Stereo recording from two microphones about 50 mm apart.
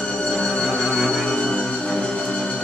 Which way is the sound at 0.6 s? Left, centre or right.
Centre.